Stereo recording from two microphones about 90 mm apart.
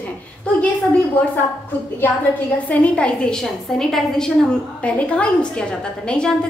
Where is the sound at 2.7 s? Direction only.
15° left (ahead or behind).